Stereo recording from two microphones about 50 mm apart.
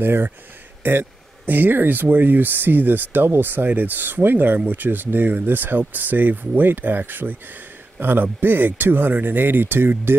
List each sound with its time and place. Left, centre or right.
0.0 s speech: right